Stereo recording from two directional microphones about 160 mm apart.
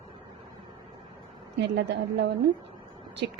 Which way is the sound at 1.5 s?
90° right.